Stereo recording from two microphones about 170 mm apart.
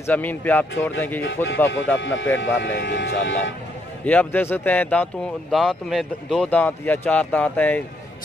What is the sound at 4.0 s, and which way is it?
A man's voice, 10° left (ahead or behind).